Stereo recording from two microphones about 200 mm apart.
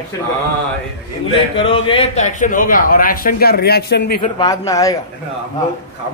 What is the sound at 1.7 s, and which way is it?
A man's voice, 30° left (ahead or behind).